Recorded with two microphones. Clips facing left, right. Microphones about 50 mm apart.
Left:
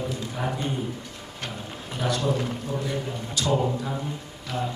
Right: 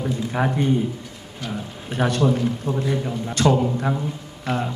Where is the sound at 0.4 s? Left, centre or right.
Right.